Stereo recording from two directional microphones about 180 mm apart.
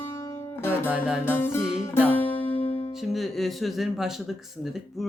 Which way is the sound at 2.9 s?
Centre (ahead or behind).